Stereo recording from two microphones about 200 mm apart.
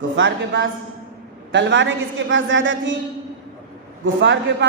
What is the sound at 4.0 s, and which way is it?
Speech, 65° right (ahead or behind).